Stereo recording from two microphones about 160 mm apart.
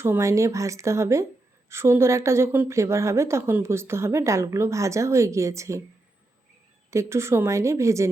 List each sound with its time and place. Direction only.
0.0 s speech: 15° right (ahead or behind)
6.9 s speech: 15° right (ahead or behind)